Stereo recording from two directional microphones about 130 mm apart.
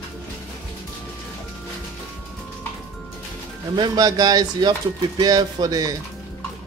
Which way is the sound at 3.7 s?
35° right (ahead or behind).